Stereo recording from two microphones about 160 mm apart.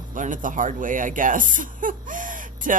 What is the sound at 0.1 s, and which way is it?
Speech, 55° right (ahead or behind).